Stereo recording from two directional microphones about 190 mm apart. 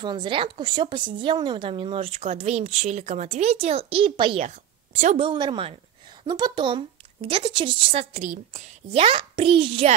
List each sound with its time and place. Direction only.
0.0 s a woman's voice: 25° right (ahead or behind)
4.5 s a woman's voice: 40° right (ahead or behind)